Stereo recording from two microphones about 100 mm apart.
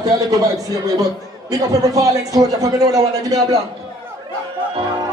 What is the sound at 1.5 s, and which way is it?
A man's voice, 35° right (ahead or behind).